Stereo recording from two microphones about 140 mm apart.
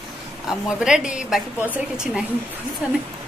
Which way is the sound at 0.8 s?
5° right (ahead or behind).